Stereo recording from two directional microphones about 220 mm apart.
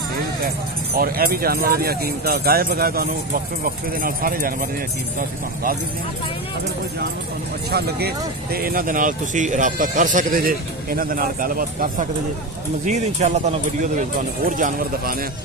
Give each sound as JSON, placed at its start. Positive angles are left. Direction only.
{"t": 0.9, "sound": "speech", "side_deg": -40}
{"t": 7.7, "sound": "speech", "side_deg": -45}